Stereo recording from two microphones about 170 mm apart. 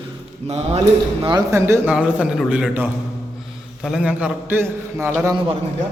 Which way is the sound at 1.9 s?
5° right (ahead or behind).